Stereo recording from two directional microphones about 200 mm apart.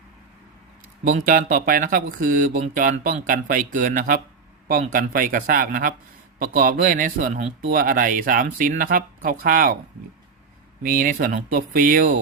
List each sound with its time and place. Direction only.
1.0 s speech: 40° right (ahead or behind)
10.8 s speech: 45° right (ahead or behind)